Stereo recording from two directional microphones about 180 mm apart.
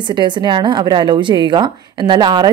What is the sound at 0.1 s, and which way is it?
A woman's voice, 25° right (ahead or behind).